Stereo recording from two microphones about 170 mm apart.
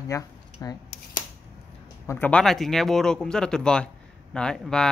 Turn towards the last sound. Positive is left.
turn(degrees=5)  # may be behind; listen again after turning